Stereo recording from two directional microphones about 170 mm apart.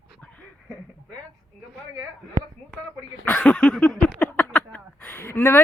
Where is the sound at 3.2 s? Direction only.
10° left (ahead or behind).